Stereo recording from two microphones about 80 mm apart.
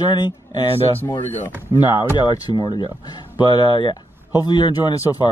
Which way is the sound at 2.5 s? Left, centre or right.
Right.